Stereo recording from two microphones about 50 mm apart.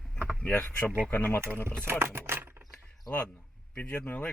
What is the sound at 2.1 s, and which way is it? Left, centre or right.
Speech, right.